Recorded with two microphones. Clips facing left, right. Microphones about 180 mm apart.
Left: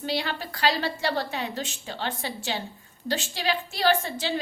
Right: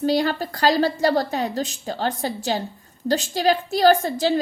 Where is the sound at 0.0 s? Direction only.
40° right (ahead or behind).